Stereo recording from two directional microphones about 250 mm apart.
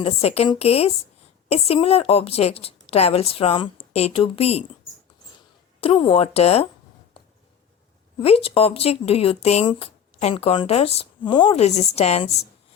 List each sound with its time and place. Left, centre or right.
0.0 s speech: left
5.8 s speech: left
8.2 s speech: left